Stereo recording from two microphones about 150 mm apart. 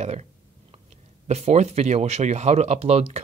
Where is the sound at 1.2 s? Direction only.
45° right (ahead or behind).